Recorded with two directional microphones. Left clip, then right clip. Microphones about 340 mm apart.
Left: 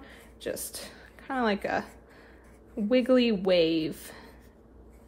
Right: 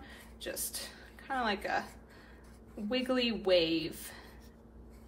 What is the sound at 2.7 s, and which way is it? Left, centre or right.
A woman's voice, left.